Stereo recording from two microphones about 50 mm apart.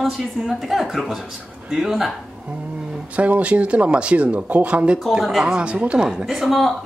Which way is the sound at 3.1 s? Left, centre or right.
Right.